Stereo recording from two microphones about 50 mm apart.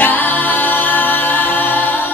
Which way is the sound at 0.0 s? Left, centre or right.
Left.